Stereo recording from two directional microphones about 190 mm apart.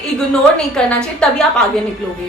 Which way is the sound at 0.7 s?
5° left (ahead or behind).